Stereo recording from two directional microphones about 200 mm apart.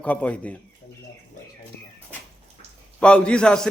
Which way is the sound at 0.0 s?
5° left (ahead or behind).